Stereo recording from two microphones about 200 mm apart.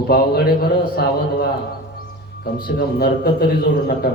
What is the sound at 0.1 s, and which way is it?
A man's voice, 50° left (ahead or behind).